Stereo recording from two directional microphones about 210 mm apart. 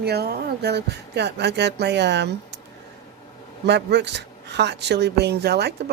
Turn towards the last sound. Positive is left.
turn(degrees=-50)  # may be behind; listen again after turning